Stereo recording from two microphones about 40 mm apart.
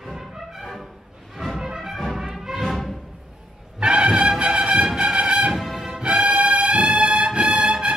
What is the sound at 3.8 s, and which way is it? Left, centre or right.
Music, right.